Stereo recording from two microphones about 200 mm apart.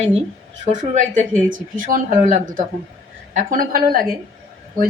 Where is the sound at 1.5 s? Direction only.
40° right (ahead or behind).